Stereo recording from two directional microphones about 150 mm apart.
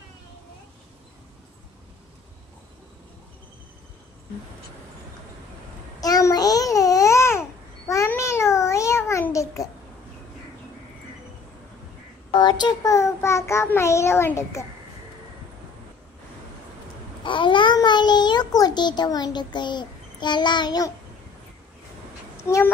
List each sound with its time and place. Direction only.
5.9 s babbling: 25° left (ahead or behind)
12.4 s child singing: 30° left (ahead or behind)
17.2 s a child's voice: 35° left (ahead or behind)
22.4 s speech: 20° left (ahead or behind)